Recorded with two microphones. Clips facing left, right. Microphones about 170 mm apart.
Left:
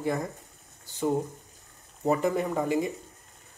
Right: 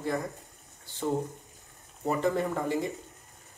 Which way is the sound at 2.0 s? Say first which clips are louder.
Left 2 dB; 15° left (ahead or behind).